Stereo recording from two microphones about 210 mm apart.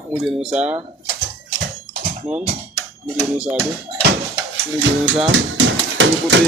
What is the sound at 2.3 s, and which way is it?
Speech, 5° right (ahead or behind).